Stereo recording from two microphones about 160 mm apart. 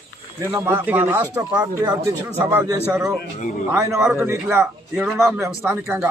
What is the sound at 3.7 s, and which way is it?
A man's voice, 20° right (ahead or behind).